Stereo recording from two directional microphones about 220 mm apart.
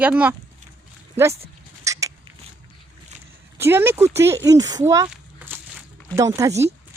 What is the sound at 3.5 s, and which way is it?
Speech, 10° right (ahead or behind).